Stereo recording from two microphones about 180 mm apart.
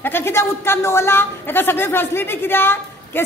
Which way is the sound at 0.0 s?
15° left (ahead or behind).